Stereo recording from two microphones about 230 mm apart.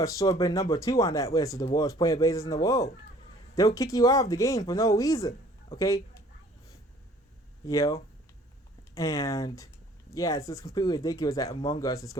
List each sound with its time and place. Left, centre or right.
0.0 s speech: centre
7.7 s speech: centre
9.0 s speech: centre